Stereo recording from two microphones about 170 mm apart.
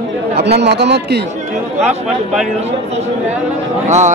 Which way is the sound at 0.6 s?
80° right.